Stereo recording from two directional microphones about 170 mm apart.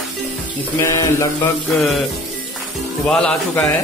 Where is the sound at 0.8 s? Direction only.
20° left (ahead or behind).